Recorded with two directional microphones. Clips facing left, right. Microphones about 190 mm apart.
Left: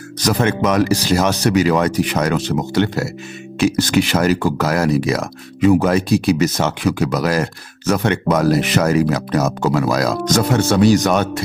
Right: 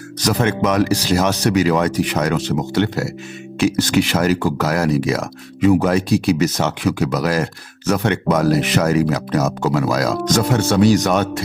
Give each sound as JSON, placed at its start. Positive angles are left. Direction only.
{"t": 0.2, "sound": "speech", "side_deg": 50}